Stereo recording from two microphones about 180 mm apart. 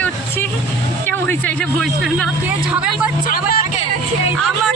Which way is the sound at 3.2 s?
50° left (ahead or behind).